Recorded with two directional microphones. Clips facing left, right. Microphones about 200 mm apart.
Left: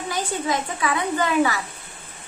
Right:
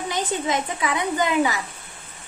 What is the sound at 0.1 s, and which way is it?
A woman's voice, 20° right (ahead or behind).